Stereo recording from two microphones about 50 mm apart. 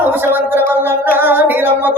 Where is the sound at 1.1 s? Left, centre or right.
Right.